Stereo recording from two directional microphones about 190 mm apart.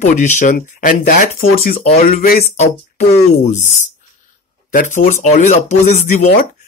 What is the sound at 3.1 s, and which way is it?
Speech, 40° left (ahead or behind).